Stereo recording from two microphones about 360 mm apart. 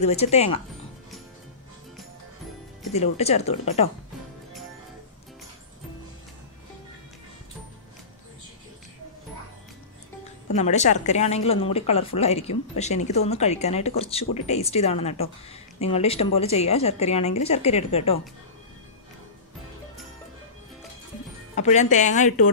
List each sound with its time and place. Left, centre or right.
0.0 s a woman's voice: centre
2.9 s a woman's voice: centre
10.5 s a woman's voice: centre
21.5 s a woman's voice: centre